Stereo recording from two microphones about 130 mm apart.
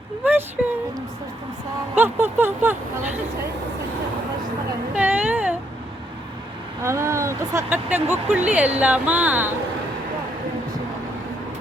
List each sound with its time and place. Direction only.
2.0 s speech: 15° right (ahead or behind)
4.9 s a sound: 10° right (ahead or behind)
6.8 s speech: 20° right (ahead or behind)